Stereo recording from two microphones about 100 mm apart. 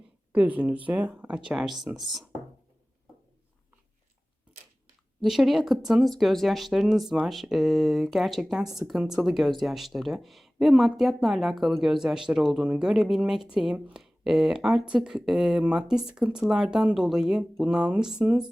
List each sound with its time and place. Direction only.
0.3 s speech: 15° right (ahead or behind)
5.2 s speech: centre (ahead or behind)